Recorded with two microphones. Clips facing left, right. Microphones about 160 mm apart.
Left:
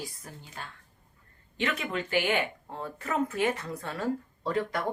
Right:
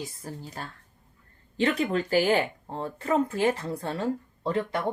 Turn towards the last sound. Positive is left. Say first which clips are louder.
# right 2 dB
turn(degrees=-25)  # may be behind; listen again after turning